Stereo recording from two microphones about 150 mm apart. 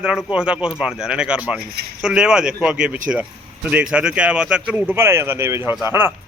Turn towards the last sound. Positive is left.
turn(degrees=-15)  # may be behind; listen again after turning